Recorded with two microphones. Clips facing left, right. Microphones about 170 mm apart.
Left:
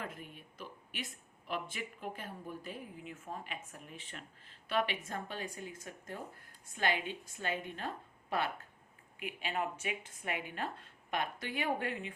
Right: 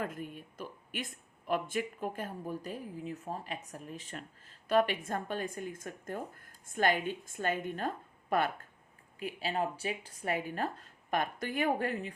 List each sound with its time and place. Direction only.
0.0 s speech: 45° right (ahead or behind)
9.1 s speech: 35° right (ahead or behind)